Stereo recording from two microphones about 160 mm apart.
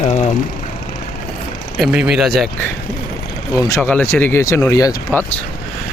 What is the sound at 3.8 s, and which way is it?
Speech, 10° left (ahead or behind).